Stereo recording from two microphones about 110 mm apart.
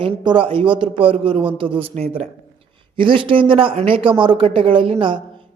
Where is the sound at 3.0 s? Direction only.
50° right (ahead or behind).